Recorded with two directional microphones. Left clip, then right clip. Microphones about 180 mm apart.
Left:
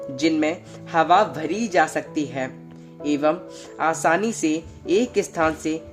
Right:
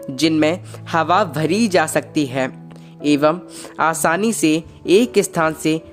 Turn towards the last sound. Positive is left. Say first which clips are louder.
# right 4 dB
turn(degrees=-40)  # may be behind; listen again after turning